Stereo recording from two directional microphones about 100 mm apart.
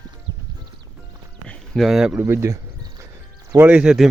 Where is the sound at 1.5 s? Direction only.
Centre (ahead or behind).